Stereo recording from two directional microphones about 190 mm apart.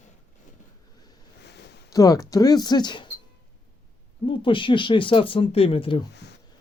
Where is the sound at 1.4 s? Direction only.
60° left (ahead or behind).